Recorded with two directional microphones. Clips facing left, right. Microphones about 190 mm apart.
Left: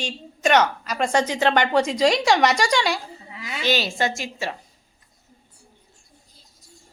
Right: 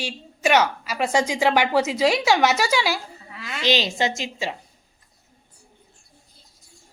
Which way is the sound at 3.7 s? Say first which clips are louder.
Right 1 dB; 20° right (ahead or behind).